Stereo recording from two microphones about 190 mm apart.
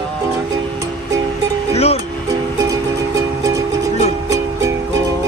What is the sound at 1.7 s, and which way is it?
Music, 35° left (ahead or behind).